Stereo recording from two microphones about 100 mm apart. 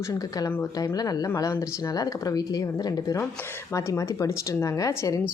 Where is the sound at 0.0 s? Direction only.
35° left (ahead or behind).